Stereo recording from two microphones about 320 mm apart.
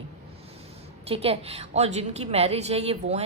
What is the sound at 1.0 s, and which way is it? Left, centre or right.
A woman's voice, centre.